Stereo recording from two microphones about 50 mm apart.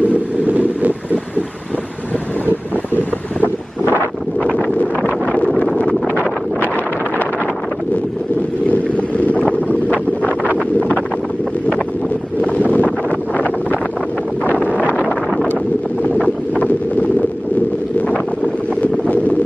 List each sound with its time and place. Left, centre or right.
0.0 s vehicle: right
8.6 s boat: left
9.7 s wind noise: right
12.4 s wind noise: left
13.3 s wind noise: right
14.8 s wind noise: right
16.2 s wind: left
18.8 s wind noise: left